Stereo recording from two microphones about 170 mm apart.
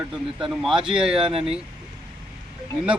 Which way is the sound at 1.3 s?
35° right (ahead or behind).